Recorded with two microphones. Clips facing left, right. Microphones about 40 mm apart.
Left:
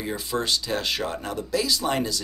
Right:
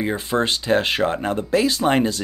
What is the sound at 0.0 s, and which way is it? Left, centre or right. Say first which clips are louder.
Speech: right 6 dB; right.